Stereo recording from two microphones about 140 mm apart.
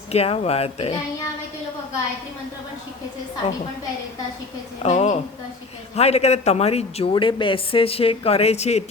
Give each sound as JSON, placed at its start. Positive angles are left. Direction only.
{"t": 0.1, "sound": "a woman's voice", "side_deg": 45}
{"t": 3.4, "sound": "a woman's voice", "side_deg": 50}
{"t": 4.8, "sound": "a woman's voice", "side_deg": 55}